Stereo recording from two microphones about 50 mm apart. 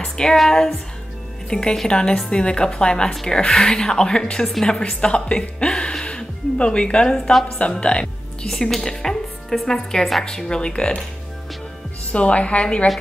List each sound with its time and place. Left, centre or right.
0.0 s a woman's voice: centre
8.5 s a woman's voice: centre
12.1 s speech: left